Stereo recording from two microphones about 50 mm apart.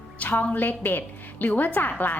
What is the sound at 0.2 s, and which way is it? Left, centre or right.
A woman's voice, left.